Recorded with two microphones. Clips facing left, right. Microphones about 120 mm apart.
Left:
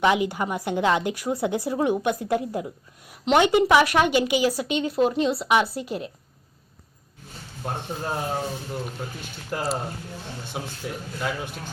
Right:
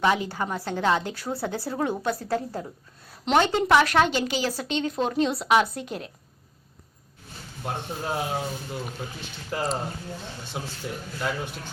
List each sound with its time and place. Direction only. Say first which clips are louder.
0.0 s a woman's voice: left 3 dB; 15° left (ahead or behind)
7.6 s a woman's voice: left 1 dB; 5° right (ahead or behind)
9.5 s a woman's voice: left 1 dB; 5° left (ahead or behind)